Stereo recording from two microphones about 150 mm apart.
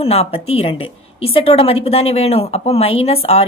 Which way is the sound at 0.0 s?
40° left (ahead or behind).